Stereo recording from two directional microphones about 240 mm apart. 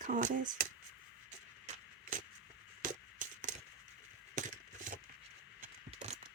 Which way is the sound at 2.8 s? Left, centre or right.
Right.